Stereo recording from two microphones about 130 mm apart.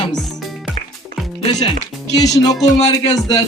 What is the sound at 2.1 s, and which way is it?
Speech, 25° left (ahead or behind).